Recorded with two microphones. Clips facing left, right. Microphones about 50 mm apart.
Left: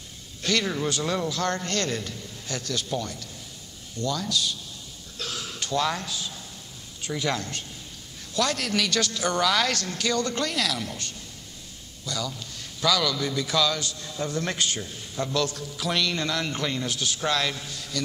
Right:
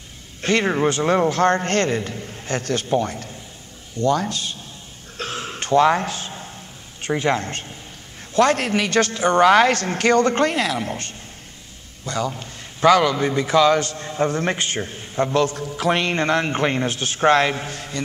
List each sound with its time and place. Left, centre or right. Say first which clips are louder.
0.4 s a man's voice: right 7 dB; right
5.1 s a sound: right 6 dB; right
7.0 s a man's voice: right 8 dB; right